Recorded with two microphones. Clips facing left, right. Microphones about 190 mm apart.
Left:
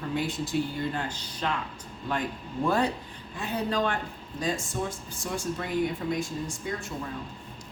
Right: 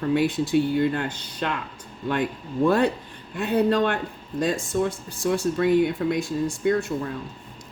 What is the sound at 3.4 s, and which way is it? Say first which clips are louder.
Speech: right 8 dB; 65° right (ahead or behind).